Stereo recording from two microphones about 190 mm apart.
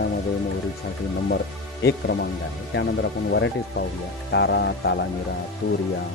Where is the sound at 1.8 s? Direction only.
60° left (ahead or behind).